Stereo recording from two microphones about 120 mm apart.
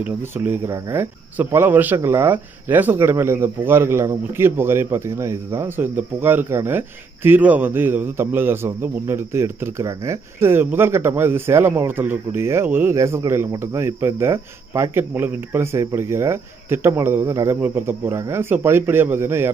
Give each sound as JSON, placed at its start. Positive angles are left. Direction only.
{"t": 0.7, "sound": "speech", "side_deg": -25}